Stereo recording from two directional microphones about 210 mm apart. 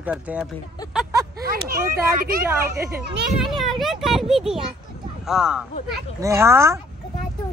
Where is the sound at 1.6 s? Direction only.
45° right (ahead or behind).